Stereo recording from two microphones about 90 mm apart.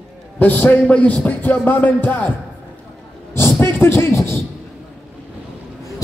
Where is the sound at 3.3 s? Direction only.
25° left (ahead or behind).